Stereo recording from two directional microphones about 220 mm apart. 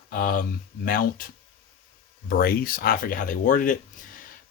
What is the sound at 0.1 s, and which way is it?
Speech, 40° left (ahead or behind).